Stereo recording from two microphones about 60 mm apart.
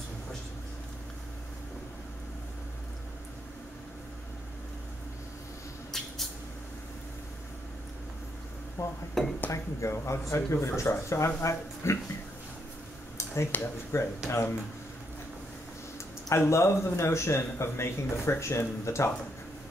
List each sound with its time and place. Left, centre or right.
5.9 s a sound: centre
8.8 s dishes: left
9.2 s dishes: centre
9.5 s speech: left
13.5 s speech: left
13.9 s speech: left
16.3 s speech: left